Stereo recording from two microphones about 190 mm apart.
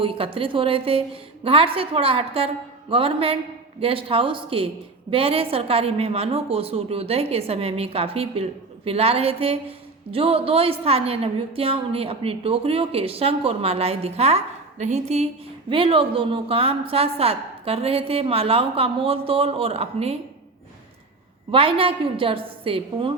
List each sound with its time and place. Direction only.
0.0 s a woman's voice: 30° right (ahead or behind)
21.5 s a woman's voice: 30° right (ahead or behind)